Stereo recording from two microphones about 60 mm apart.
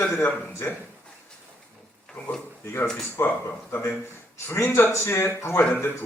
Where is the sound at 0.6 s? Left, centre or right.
Left.